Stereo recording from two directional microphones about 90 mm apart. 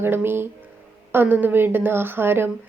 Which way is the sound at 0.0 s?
25° right (ahead or behind).